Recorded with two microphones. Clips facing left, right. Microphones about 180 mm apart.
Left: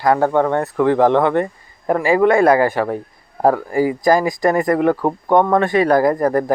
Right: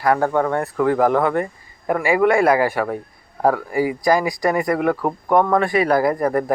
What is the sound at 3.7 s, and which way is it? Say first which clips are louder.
Speech: left 3 dB; 40° left (ahead or behind).